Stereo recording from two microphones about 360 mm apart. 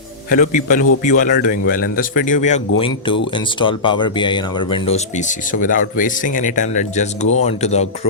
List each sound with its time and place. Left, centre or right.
0.3 s speech: left